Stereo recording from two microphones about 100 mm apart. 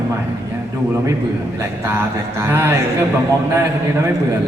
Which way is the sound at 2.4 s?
25° right (ahead or behind).